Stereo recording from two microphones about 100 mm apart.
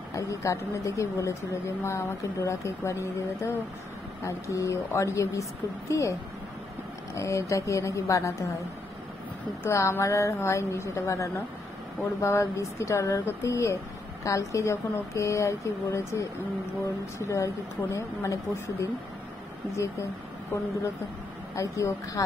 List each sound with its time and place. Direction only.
0.1 s speech: 30° left (ahead or behind)
7.2 s speech: 30° left (ahead or behind)
9.6 s a woman's voice: 30° left (ahead or behind)
21.5 s speech: 35° left (ahead or behind)